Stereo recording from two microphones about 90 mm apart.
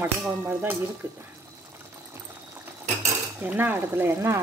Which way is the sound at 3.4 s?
20° right (ahead or behind).